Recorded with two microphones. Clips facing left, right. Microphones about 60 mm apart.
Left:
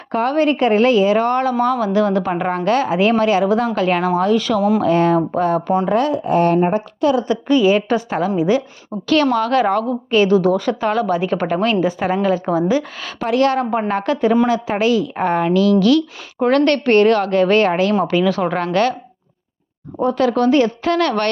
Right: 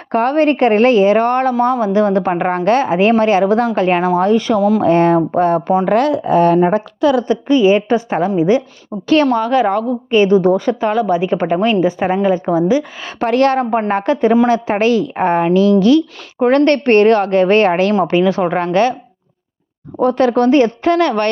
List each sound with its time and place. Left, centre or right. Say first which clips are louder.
0.1 s speech: right 3 dB; right
1.8 s a woman's voice: right 3 dB; right
3.8 s a woman's voice: right 3 dB; right
5.8 s speech: right 3 dB; right
7.3 s a woman's voice: right 3 dB; right
9.5 s a woman's voice: right 2 dB; centre
11.8 s a woman's voice: right 3 dB; right
13.1 s a woman's voice: right 3 dB; right
15.1 s a woman's voice: right 3 dB; right
18.3 s a woman's voice: right 3 dB; right
20.1 s a woman's voice: right 3 dB; right
20.8 s a woman's voice: right 4 dB; right